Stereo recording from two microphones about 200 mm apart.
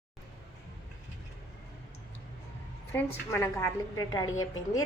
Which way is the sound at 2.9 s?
15° left (ahead or behind).